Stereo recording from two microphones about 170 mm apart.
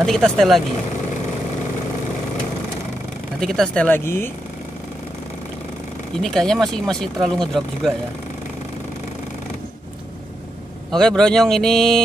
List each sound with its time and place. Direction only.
0.0 s speech: centre (ahead or behind)
3.3 s speech: centre (ahead or behind)
6.2 s speech: 5° left (ahead or behind)
10.9 s speech: 5° left (ahead or behind)